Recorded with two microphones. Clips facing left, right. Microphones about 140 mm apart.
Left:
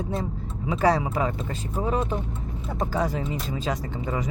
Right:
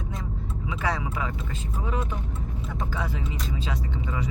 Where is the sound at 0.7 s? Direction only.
40° left (ahead or behind).